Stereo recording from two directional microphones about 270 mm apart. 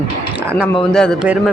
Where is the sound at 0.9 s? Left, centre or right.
Centre.